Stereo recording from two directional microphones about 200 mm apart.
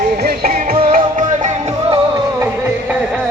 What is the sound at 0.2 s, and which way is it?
Music, 50° right (ahead or behind).